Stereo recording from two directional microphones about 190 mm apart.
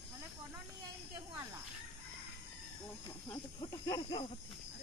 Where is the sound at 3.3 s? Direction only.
20° left (ahead or behind).